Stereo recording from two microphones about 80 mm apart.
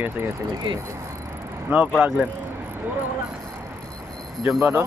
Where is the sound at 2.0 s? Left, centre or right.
Centre.